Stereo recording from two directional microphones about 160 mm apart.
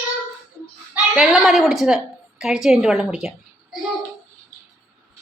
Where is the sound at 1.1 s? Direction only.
5° right (ahead or behind).